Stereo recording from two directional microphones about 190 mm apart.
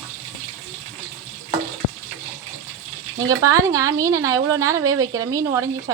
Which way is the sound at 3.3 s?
20° right (ahead or behind).